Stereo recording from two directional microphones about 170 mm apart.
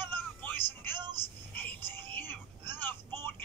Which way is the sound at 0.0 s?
10° left (ahead or behind).